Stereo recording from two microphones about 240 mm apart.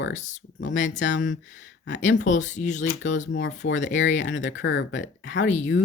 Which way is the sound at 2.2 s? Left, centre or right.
Left.